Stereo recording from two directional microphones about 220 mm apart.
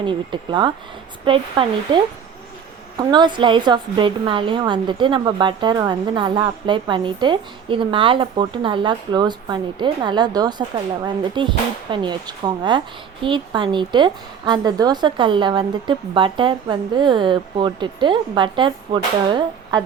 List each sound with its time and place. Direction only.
0.0 s a woman's voice: 20° right (ahead or behind)
3.0 s a woman's voice: 20° right (ahead or behind)